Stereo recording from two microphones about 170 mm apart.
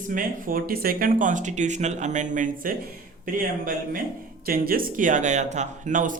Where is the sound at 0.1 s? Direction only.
55° right (ahead or behind).